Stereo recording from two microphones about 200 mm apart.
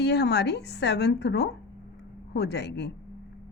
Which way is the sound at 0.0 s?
55° left (ahead or behind).